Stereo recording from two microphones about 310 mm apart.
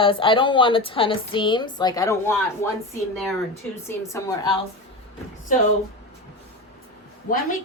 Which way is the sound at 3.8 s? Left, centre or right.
Centre.